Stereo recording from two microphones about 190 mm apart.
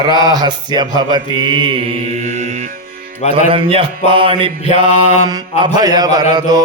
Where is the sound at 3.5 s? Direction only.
30° right (ahead or behind).